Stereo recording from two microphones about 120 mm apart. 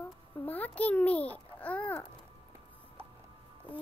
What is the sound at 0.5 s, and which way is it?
Child singing, 15° left (ahead or behind).